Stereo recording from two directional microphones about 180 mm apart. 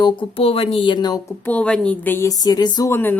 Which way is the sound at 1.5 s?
5° left (ahead or behind).